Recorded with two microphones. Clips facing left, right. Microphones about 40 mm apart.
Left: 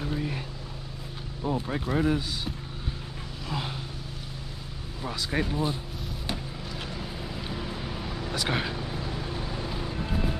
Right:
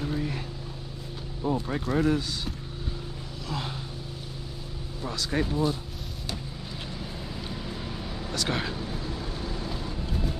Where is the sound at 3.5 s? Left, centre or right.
Centre.